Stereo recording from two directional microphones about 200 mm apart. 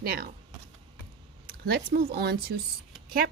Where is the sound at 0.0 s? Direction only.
50° right (ahead or behind).